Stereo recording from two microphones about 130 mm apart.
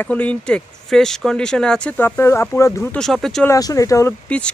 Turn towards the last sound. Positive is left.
turn(degrees=10)  # may be behind; listen again after turning